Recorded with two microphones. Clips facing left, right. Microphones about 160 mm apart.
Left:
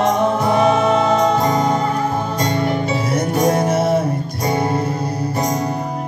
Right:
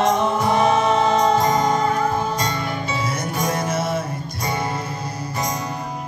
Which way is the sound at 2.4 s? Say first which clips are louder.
Left 7 dB; 55° left (ahead or behind).